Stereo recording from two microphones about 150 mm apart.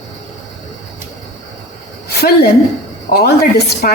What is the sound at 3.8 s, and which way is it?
Speech, 75° left (ahead or behind).